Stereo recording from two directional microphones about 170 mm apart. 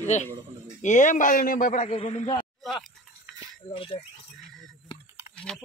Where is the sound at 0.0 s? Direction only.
45° left (ahead or behind).